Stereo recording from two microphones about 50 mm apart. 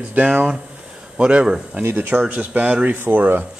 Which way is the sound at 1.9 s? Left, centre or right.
Right.